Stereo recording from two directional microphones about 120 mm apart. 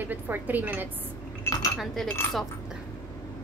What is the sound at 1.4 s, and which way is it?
Cutlery, 30° left (ahead or behind).